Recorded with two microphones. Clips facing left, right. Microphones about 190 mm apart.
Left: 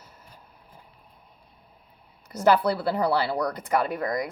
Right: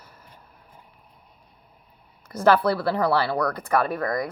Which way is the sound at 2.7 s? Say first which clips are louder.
Right 2 dB; 20° left (ahead or behind).